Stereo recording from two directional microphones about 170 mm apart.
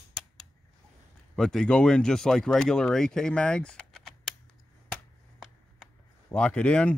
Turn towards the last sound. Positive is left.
turn(degrees=5)  # may be behind; listen again after turning